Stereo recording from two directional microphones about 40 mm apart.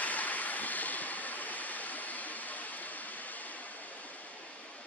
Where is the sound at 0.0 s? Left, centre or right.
Left.